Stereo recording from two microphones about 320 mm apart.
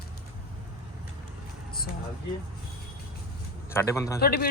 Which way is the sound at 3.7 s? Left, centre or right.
Centre.